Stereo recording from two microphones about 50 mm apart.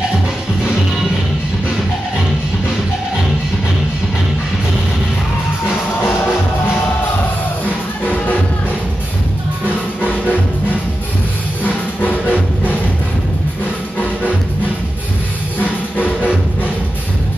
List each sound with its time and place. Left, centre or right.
11.6 s music: left